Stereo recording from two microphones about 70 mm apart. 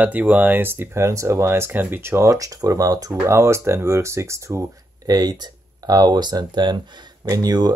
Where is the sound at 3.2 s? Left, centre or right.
Right.